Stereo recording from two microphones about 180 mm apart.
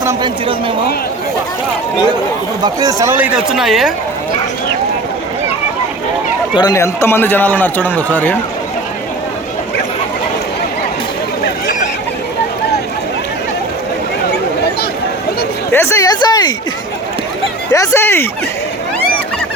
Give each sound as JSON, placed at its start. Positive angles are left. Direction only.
{"t": 0.0, "sound": "speech", "side_deg": -15}
{"t": 2.6, "sound": "speech", "side_deg": -20}
{"t": 6.6, "sound": "a man's voice", "side_deg": 20}
{"t": 15.7, "sound": "speech", "side_deg": 15}
{"t": 17.7, "sound": "a man's voice", "side_deg": 15}